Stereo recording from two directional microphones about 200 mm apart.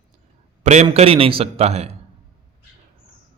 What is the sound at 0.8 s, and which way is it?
A man's voice, 30° right (ahead or behind).